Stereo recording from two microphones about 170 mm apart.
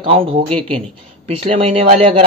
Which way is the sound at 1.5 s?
35° right (ahead or behind).